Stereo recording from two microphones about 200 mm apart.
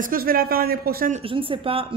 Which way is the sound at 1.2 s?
25° right (ahead or behind).